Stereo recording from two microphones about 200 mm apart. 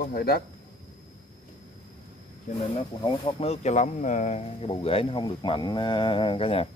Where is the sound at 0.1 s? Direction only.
50° left (ahead or behind).